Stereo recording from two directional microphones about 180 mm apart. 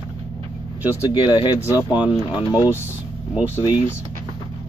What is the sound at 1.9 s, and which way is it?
Speech, 5° right (ahead or behind).